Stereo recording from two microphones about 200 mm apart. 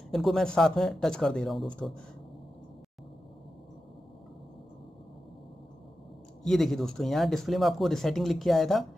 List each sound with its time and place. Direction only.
0.1 s speech: centre (ahead or behind)
6.4 s speech: centre (ahead or behind)